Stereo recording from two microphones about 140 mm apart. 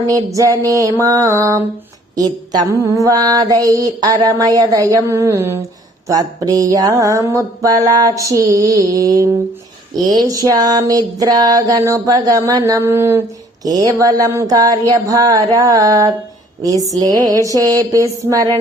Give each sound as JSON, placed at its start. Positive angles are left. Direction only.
{"t": 0.1, "sound": "mantra", "side_deg": -25}